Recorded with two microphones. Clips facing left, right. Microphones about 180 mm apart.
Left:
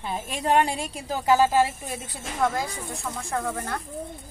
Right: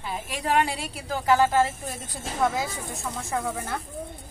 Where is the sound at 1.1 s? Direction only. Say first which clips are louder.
Left 1 dB; 15° left (ahead or behind).